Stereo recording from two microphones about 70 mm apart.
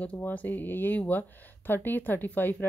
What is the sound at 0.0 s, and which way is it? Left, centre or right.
Speech, left.